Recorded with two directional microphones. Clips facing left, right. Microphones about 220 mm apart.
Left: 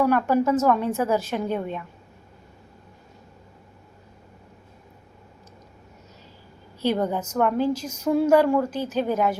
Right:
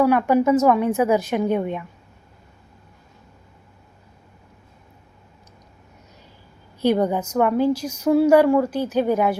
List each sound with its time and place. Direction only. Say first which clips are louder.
0.0 s a woman's voice: right 3 dB; 10° right (ahead or behind)
6.8 s a woman's voice: right 4 dB; 15° right (ahead or behind)